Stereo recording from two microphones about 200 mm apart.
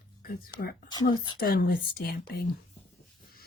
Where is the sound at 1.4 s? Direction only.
50° left (ahead or behind).